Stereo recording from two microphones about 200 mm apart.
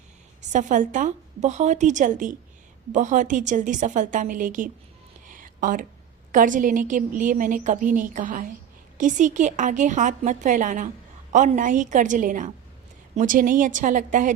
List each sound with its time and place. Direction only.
0.5 s a woman's voice: 40° right (ahead or behind)
5.3 s a sound: 40° right (ahead or behind)
6.3 s a woman's voice: 40° right (ahead or behind)